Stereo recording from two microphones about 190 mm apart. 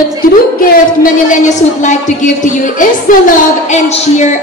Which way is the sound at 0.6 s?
45° left (ahead or behind).